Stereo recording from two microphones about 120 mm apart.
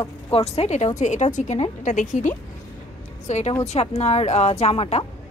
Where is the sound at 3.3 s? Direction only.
70° left (ahead or behind).